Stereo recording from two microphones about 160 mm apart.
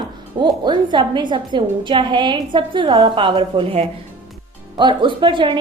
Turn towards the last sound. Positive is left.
turn(degrees=-30)  # may be behind; listen again after turning